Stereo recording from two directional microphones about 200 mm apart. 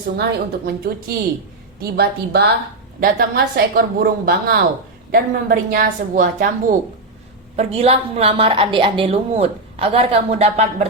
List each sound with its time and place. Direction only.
0.2 s a woman's voice: 50° right (ahead or behind)
7.5 s a woman's voice: 30° right (ahead or behind)